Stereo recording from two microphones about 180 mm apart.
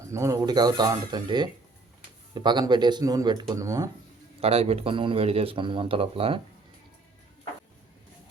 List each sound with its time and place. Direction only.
0.0 s speech: 15° right (ahead or behind)
4.4 s speech: 35° right (ahead or behind)